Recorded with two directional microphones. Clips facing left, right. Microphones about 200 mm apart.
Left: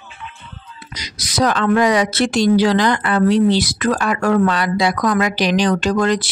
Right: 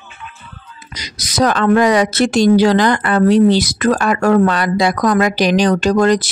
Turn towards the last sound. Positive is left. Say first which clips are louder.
# right 4 dB
turn(degrees=-40)  # may be behind; listen again after turning